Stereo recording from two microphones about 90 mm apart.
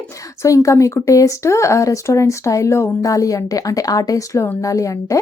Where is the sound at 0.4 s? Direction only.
40° left (ahead or behind).